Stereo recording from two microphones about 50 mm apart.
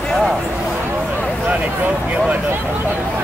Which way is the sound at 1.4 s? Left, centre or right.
Right.